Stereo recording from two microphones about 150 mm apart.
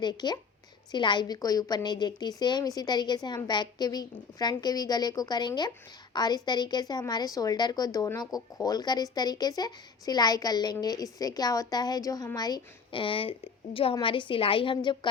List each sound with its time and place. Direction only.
0.0 s a woman's voice: 30° left (ahead or behind)